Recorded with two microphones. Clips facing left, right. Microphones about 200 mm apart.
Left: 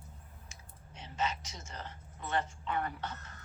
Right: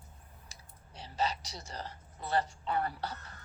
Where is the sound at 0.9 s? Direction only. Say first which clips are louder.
Right 2 dB; 35° right (ahead or behind).